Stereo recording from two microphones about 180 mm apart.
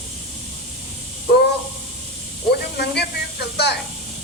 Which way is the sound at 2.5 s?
65° left (ahead or behind).